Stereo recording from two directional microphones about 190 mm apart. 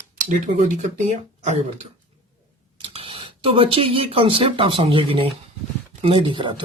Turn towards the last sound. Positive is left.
turn(degrees=-25)  # may be behind; listen again after turning